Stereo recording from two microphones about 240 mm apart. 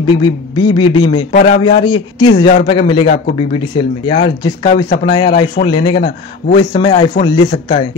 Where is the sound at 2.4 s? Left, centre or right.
Left.